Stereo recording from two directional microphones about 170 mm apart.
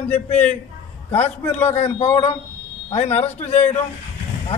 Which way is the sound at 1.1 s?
40° left (ahead or behind).